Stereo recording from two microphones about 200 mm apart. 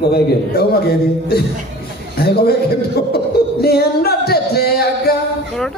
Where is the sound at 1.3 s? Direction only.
50° left (ahead or behind).